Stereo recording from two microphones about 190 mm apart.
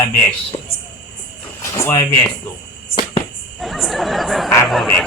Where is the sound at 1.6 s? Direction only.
15° left (ahead or behind).